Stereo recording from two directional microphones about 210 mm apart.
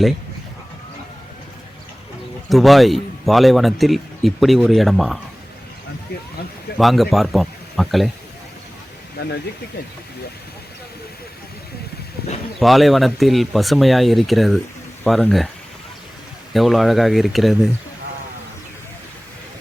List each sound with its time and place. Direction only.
2.5 s a man's voice: centre (ahead or behind)
6.7 s speech: centre (ahead or behind)
9.2 s speech: 50° left (ahead or behind)
12.2 s speech: 50° left (ahead or behind)
12.5 s a man's voice: centre (ahead or behind)
16.5 s a man's voice: centre (ahead or behind)